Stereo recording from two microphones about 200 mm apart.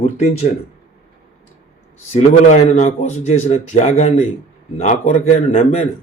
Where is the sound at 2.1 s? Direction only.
35° left (ahead or behind).